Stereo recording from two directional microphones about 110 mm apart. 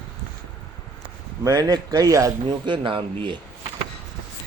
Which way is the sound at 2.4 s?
45° right (ahead or behind).